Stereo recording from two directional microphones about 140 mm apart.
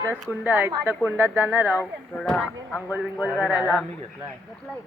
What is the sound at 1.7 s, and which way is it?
Speech, 15° left (ahead or behind).